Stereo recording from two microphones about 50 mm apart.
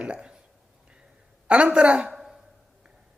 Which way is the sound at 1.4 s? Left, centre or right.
Right.